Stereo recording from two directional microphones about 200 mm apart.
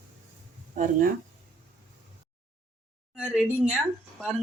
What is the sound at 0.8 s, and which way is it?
Speech, 45° right (ahead or behind).